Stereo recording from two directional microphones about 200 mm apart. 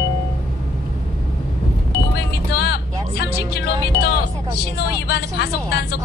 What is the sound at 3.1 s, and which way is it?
Speech, 55° left (ahead or behind).